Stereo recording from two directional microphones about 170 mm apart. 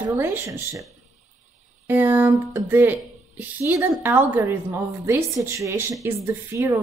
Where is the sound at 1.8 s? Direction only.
10° right (ahead or behind).